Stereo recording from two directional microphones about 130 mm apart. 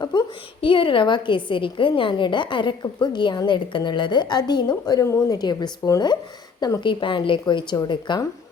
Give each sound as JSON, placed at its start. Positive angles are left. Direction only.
{"t": 0.0, "sound": "a woman's voice", "side_deg": 35}